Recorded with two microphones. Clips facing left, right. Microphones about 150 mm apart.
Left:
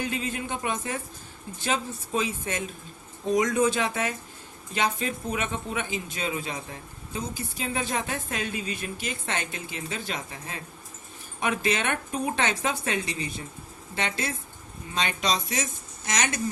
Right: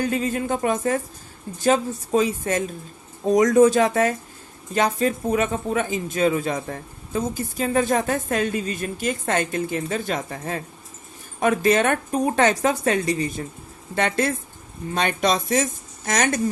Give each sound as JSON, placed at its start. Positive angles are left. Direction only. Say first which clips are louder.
{"t": 0.0, "sound": "speech", "louder": "right 7 dB", "side_deg": -45}